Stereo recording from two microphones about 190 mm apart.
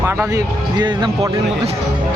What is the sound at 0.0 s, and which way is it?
Speech, 15° right (ahead or behind).